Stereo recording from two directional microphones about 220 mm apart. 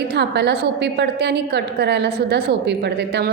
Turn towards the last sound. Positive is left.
turn(degrees=-50)  # may be behind; listen again after turning